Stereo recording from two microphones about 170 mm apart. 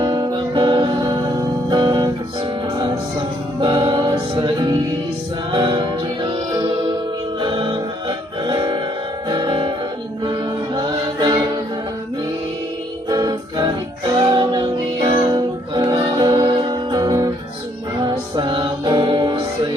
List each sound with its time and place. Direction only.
0.0 s music: 25° right (ahead or behind)
3.6 s music: 25° right (ahead or behind)
7.3 s music: 25° right (ahead or behind)
10.8 s a capella: 25° right (ahead or behind)
13.1 s music: 25° right (ahead or behind)